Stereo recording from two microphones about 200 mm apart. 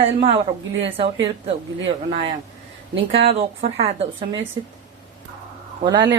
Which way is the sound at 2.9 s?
30° right (ahead or behind).